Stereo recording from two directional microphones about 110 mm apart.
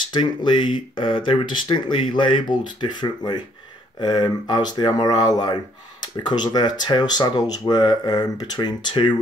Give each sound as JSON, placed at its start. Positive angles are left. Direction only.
{"t": 0.1, "sound": "speech", "side_deg": 45}